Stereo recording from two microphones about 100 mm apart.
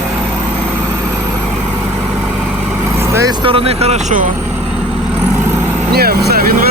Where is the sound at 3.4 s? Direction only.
70° right (ahead or behind); by 4.0 s 90° right.